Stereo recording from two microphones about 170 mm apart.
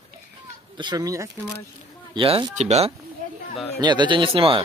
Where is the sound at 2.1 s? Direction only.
30° right (ahead or behind).